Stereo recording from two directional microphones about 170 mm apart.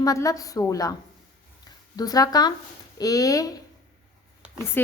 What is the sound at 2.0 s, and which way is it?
A woman's voice, 20° left (ahead or behind).